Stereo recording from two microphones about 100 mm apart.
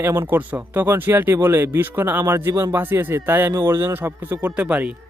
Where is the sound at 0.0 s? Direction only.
25° right (ahead or behind).